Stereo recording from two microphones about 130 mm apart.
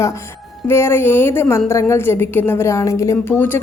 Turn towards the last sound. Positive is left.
turn(degrees=15)  # may be behind; listen again after turning